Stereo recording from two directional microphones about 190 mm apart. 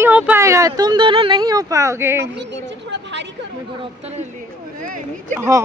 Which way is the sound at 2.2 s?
65° right (ahead or behind).